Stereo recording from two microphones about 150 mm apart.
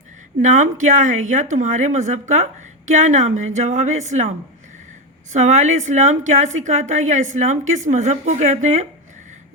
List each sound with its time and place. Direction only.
0.4 s a woman's voice: 55° right (ahead or behind)
5.3 s a woman's voice: 50° right (ahead or behind)